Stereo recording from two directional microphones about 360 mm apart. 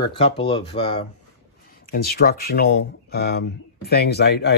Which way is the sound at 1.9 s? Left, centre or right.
Left.